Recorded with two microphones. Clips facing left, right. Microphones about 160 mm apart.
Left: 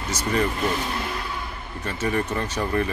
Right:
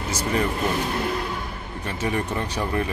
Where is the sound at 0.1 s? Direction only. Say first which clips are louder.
Left 1 dB; 10° right (ahead or behind).